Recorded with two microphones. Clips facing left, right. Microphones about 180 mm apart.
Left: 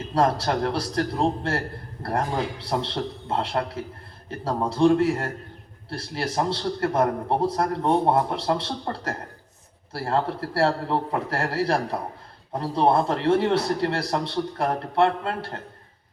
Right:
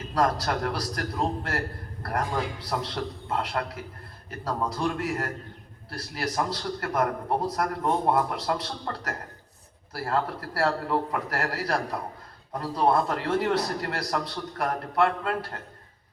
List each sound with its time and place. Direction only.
0.1 s a man's voice: 30° left (ahead or behind)